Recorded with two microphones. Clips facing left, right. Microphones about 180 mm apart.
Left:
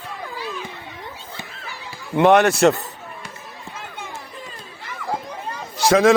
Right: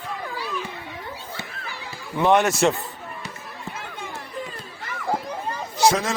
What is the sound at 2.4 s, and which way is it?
Speech, 35° left (ahead or behind).